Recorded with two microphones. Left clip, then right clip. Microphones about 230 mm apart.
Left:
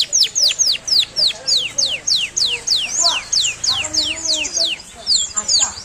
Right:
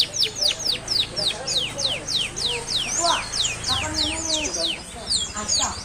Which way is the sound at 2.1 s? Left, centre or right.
Left.